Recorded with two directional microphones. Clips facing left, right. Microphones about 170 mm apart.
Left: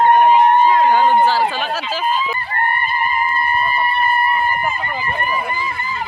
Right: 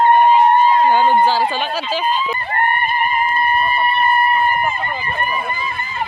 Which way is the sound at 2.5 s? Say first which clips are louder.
Right 4 dB; 25° right (ahead or behind).